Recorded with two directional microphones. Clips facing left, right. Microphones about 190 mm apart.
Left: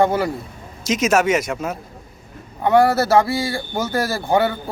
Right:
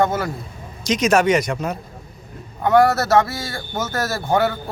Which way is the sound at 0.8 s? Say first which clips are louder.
Right 1 dB; 5° left (ahead or behind).